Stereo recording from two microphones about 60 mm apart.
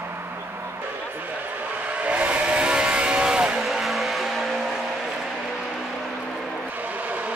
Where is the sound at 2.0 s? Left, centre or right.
Right.